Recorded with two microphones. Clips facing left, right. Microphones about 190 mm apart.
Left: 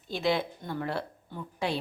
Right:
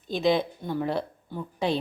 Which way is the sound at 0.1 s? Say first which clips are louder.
Right 5 dB; 20° right (ahead or behind).